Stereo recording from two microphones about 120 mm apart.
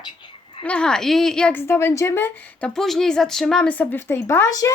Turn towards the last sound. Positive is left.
turn(degrees=25)  # may be behind; listen again after turning